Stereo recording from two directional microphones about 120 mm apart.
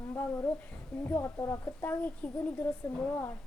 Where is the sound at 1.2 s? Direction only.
25° left (ahead or behind).